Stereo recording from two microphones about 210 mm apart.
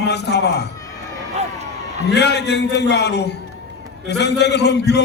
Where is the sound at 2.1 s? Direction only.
55° left (ahead or behind).